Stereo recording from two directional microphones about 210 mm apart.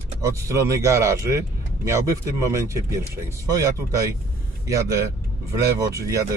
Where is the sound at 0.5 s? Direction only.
15° right (ahead or behind).